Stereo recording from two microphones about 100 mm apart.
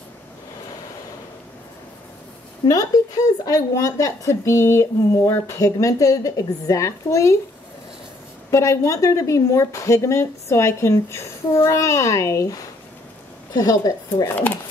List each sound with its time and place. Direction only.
2.7 s speech: 35° left (ahead or behind)
8.5 s speech: 30° left (ahead or behind)